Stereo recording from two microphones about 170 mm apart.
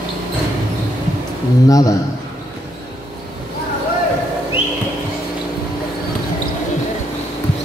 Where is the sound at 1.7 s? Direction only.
20° left (ahead or behind).